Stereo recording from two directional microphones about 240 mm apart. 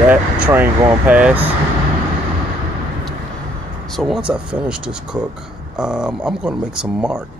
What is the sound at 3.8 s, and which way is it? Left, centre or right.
Speech, centre.